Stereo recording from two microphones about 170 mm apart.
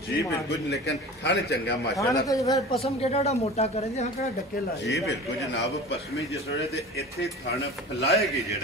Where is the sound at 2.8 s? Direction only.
40° left (ahead or behind).